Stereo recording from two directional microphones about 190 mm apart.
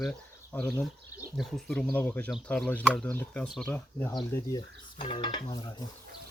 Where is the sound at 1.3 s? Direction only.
5° left (ahead or behind).